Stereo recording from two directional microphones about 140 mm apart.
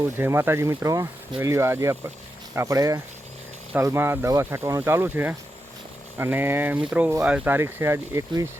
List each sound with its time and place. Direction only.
0.2 s speech: 15° right (ahead or behind)